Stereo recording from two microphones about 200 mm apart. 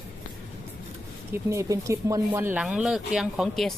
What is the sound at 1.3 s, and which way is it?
Speech, 15° right (ahead or behind).